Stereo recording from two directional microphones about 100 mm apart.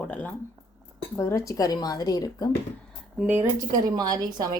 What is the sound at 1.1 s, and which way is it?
Speech, 25° left (ahead or behind).